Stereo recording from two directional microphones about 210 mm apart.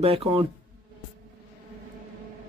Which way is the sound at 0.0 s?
30° right (ahead or behind).